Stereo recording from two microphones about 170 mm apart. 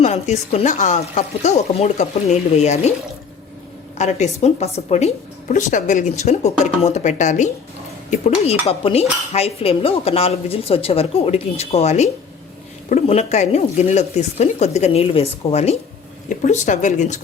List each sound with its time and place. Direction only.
0.0 s a woman's voice: 40° left (ahead or behind)
3.9 s a woman's voice: 45° left (ahead or behind)